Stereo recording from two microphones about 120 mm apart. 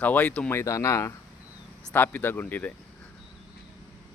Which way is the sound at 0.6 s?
25° left (ahead or behind).